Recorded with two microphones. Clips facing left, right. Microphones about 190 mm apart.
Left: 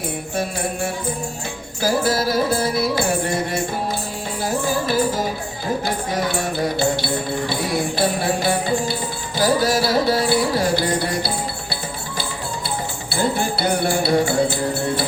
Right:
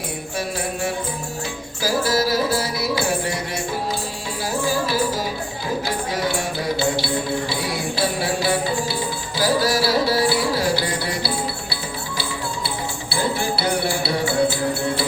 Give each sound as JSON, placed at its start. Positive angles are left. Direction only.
{"t": 1.8, "sound": "music", "side_deg": 55}
{"t": 4.6, "sound": "music", "side_deg": 55}
{"t": 6.7, "sound": "music", "side_deg": 55}
{"t": 13.1, "sound": "music", "side_deg": 55}